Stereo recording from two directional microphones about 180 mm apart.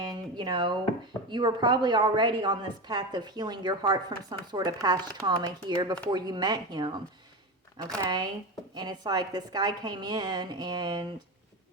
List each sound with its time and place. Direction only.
0.0 s a sound: 25° right (ahead or behind)
1.3 s a woman's voice: 25° right (ahead or behind)
8.0 s a woman's voice: 25° right (ahead or behind)